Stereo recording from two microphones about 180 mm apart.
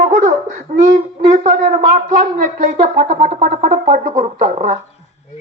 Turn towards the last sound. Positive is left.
turn(degrees=-40)  # may be behind; listen again after turning